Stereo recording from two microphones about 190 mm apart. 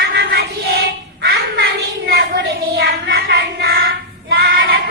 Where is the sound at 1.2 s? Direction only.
60° right (ahead or behind).